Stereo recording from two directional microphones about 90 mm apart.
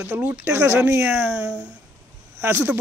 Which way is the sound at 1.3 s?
10° right (ahead or behind).